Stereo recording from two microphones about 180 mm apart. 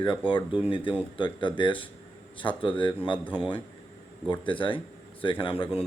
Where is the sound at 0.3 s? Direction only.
30° left (ahead or behind).